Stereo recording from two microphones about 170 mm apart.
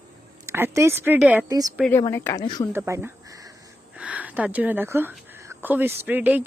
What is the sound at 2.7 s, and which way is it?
Speech, 10° right (ahead or behind).